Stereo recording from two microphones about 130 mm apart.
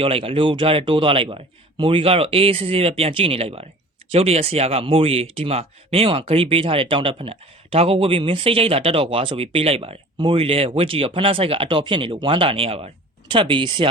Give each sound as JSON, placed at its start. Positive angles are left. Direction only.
{"t": 0.0, "sound": "speech", "side_deg": -45}